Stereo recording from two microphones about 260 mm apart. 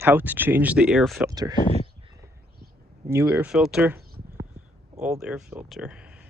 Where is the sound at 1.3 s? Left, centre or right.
Centre.